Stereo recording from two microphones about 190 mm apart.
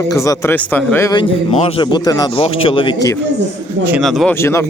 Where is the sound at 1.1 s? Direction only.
30° left (ahead or behind).